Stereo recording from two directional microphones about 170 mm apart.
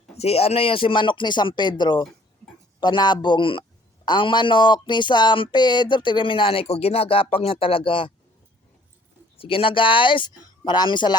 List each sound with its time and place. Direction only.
0.2 s speech: 35° left (ahead or behind)
9.4 s speech: 30° left (ahead or behind)